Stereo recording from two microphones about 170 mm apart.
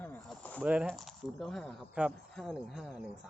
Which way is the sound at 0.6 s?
5° right (ahead or behind).